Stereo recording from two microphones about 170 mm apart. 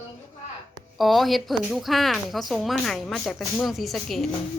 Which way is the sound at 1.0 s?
Centre (ahead or behind).